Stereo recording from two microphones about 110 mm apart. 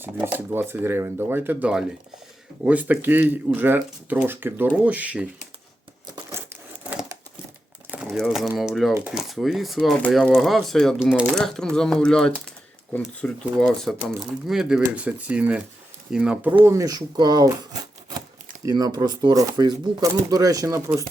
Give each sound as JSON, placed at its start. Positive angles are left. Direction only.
{"t": 0.0, "sound": "speech", "side_deg": -15}
{"t": 8.0, "sound": "speech", "side_deg": 0}
{"t": 11.0, "sound": "speech", "side_deg": -10}
{"t": 11.3, "sound": "speech", "side_deg": 5}
{"t": 16.6, "sound": "speech", "side_deg": -30}
{"t": 18.6, "sound": "speech", "side_deg": -35}